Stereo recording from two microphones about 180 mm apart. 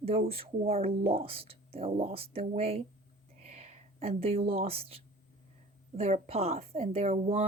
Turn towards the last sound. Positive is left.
turn(degrees=-35)  # may be behind; listen again after turning